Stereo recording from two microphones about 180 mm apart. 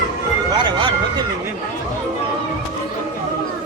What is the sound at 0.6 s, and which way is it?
Vehicle, 25° right (ahead or behind).